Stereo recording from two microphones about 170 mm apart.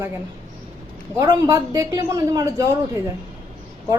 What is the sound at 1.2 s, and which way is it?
A woman's voice, 20° right (ahead or behind).